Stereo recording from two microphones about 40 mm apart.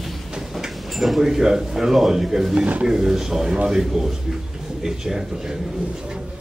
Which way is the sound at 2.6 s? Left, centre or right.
Right.